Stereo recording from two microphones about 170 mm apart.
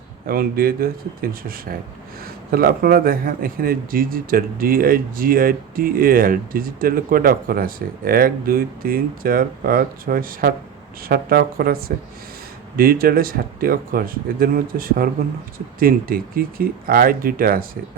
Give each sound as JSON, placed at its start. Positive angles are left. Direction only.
{"t": 0.3, "sound": "a man's voice", "side_deg": -60}